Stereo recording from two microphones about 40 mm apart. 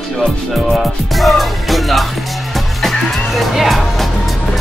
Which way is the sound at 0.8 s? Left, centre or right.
Centre.